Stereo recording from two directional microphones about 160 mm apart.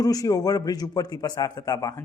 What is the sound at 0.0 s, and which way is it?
A man's voice, 25° left (ahead or behind).